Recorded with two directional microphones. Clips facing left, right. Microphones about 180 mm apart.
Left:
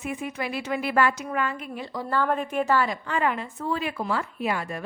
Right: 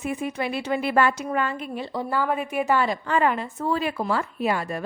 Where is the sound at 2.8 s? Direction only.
35° right (ahead or behind).